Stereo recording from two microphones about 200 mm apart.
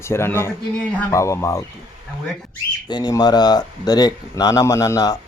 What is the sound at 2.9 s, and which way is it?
Speech, 20° left (ahead or behind).